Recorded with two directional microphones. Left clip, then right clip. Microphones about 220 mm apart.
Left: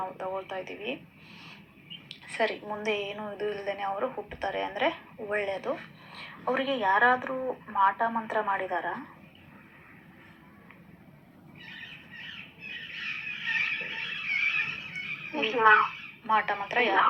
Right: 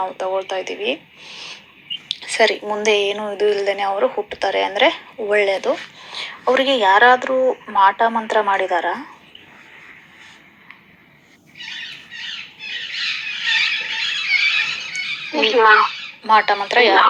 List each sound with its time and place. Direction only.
0.0 s speech: 40° right (ahead or behind)
11.5 s squawk: 40° right (ahead or behind)